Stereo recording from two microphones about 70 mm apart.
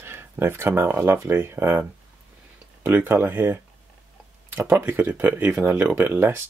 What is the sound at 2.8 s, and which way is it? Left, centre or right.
Speech, right.